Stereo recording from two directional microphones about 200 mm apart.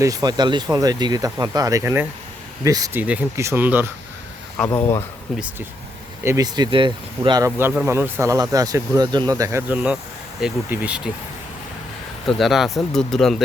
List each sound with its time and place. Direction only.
0.0 s speech: 20° right (ahead or behind)
4.5 s speech: 10° left (ahead or behind)
6.2 s speech: 15° right (ahead or behind)
12.4 s speech: centre (ahead or behind)